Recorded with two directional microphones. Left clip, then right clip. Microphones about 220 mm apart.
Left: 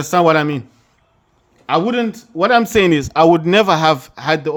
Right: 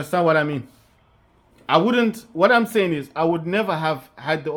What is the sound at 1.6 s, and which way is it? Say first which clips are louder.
A man's voice: left 1 dB; 10° left (ahead or behind).